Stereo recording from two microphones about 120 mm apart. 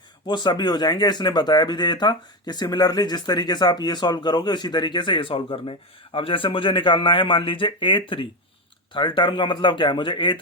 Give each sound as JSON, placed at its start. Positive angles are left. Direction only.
{"t": 0.3, "sound": "a man's voice", "side_deg": 35}